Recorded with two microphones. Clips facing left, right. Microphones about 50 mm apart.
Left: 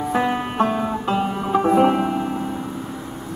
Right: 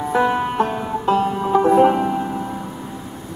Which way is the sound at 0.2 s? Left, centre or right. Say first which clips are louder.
Right 4 dB; left.